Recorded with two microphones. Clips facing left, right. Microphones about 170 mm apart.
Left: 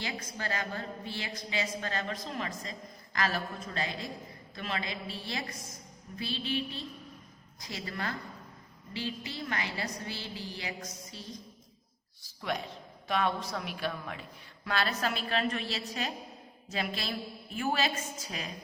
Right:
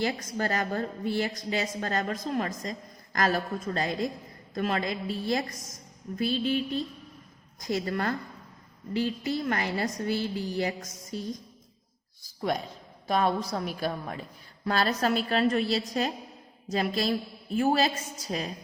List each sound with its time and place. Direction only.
0.0 s a woman's voice: 40° right (ahead or behind)
12.4 s a man's voice: 40° right (ahead or behind)